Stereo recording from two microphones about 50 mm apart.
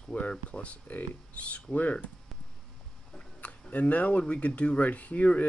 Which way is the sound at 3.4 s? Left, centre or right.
Left.